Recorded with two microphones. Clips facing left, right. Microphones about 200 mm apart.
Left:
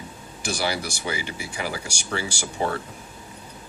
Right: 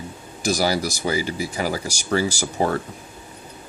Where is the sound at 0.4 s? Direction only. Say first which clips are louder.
Right 6 dB; 40° right (ahead or behind).